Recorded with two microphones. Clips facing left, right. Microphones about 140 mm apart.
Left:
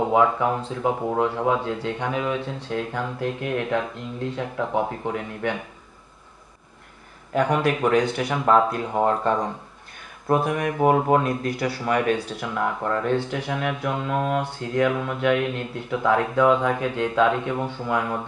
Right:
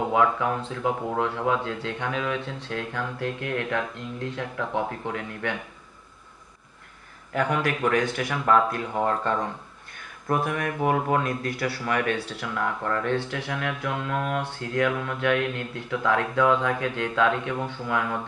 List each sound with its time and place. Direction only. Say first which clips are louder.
0.1 s speech: left 1 dB; 25° left (ahead or behind)
7.6 s speech: left 4 dB; 25° left (ahead or behind)
8.3 s speech: left 2 dB; 20° left (ahead or behind)
10.2 s speech: left 4 dB; 30° left (ahead or behind)